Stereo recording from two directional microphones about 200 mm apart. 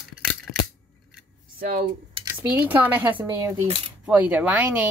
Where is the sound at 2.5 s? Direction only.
10° right (ahead or behind).